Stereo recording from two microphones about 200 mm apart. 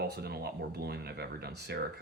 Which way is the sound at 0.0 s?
55° right (ahead or behind).